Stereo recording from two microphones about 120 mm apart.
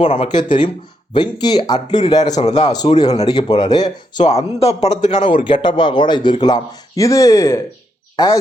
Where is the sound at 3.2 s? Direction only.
35° left (ahead or behind).